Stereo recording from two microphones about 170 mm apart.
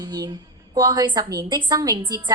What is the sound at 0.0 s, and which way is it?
A woman's voice, 20° right (ahead or behind).